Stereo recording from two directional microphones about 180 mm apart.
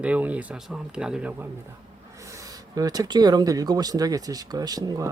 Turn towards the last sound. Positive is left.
turn(degrees=-20)  # may be behind; listen again after turning